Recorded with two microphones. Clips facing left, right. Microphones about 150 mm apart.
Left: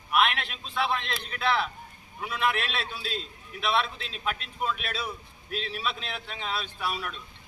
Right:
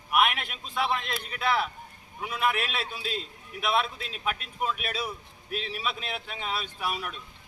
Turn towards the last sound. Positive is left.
turn(degrees=-10)  # may be behind; listen again after turning